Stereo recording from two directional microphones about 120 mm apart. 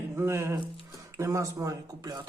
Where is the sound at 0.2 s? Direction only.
20° right (ahead or behind).